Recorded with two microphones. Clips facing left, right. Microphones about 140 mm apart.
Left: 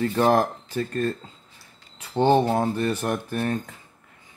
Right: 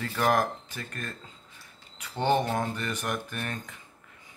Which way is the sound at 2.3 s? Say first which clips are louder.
Left 5 dB; 30° left (ahead or behind).